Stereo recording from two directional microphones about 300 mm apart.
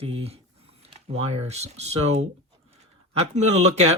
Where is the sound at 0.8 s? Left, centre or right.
Right.